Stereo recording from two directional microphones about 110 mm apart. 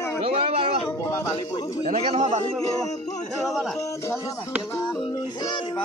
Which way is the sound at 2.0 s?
60° right (ahead or behind).